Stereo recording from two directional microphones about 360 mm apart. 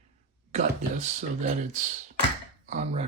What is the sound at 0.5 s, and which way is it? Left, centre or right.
Speech, centre.